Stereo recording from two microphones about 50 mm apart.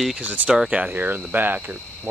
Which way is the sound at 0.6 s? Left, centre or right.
Right.